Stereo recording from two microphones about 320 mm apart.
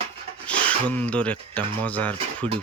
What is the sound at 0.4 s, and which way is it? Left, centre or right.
Speech, centre.